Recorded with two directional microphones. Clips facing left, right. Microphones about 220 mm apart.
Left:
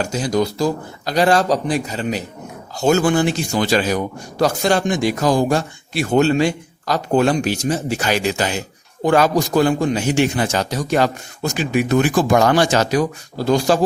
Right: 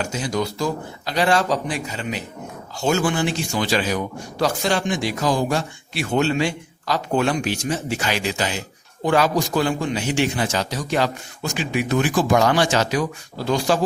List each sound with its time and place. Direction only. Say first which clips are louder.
0.0 s a man's voice: left 5 dB; 40° left (ahead or behind)